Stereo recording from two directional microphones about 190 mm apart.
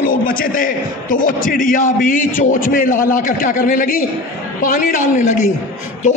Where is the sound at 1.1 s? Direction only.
45° left (ahead or behind).